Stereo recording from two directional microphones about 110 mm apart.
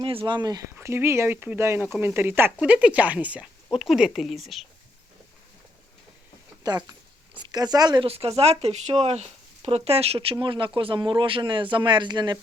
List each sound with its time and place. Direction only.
0.0 s speech: 50° right (ahead or behind)
0.8 s speech: 25° right (ahead or behind); by 4.6 s centre (ahead or behind)
6.6 s speech: 40° right (ahead or behind)
8.0 s speech: 65° right (ahead or behind); by 12.4 s 40° right (ahead or behind)